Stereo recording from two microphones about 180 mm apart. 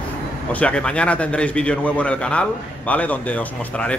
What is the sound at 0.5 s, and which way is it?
A man's voice, 5° left (ahead or behind).